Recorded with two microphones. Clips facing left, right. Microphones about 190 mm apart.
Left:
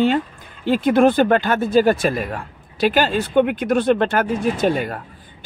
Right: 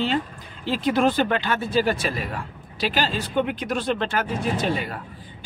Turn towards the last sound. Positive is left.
turn(degrees=45)  # may be behind; listen again after turning